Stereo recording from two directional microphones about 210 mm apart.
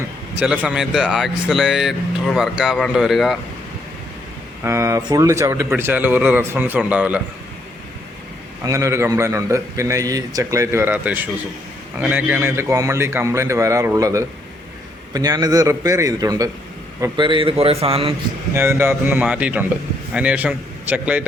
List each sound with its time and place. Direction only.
0.3 s speech: 5° right (ahead or behind)
4.6 s a man's voice: 15° right (ahead or behind)
8.6 s a man's voice: 15° right (ahead or behind)
18.5 s a man's voice: 10° right (ahead or behind)